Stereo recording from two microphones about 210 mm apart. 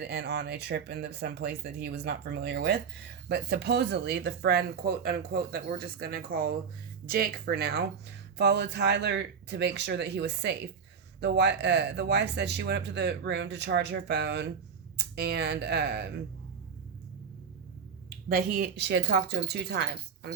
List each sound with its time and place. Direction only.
0.0 s speech: 50° right (ahead or behind)
18.3 s speech: 45° right (ahead or behind)